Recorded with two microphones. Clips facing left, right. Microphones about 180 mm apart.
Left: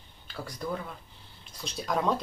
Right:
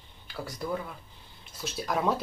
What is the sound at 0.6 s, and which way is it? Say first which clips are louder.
Speech: right 1 dB; 10° right (ahead or behind).